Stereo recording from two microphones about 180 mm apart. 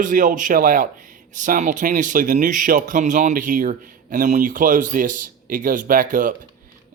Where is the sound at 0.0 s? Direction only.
45° right (ahead or behind).